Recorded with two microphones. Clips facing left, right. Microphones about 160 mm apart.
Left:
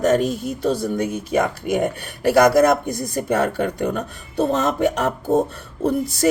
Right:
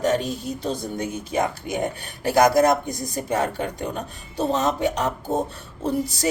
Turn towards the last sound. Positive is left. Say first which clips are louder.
# left 5 dB
turn(degrees=50)  # may be behind; listen again after turning